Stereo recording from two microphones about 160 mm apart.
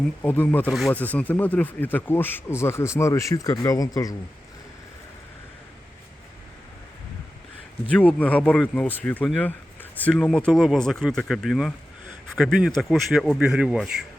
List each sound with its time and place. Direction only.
0.2 s speech: 10° left (ahead or behind)
0.7 s speech: centre (ahead or behind)
0.9 s speech: 10° left (ahead or behind)
7.9 s speech: 10° left (ahead or behind)